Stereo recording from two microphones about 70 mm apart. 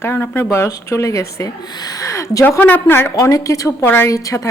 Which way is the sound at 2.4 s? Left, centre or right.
Left.